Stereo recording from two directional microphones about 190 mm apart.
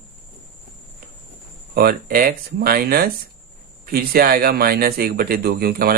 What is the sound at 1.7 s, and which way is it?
Speech, 55° right (ahead or behind).